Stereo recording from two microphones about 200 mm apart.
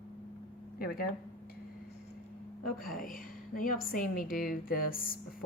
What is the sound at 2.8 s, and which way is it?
A woman's voice, 45° left (ahead or behind).